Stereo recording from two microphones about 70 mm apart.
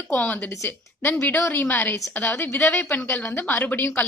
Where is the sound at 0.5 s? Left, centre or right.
Left.